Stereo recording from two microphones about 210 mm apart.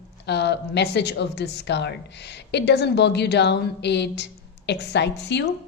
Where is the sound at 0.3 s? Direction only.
55° left (ahead or behind).